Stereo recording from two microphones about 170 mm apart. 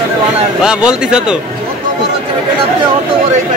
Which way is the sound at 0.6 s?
5° right (ahead or behind).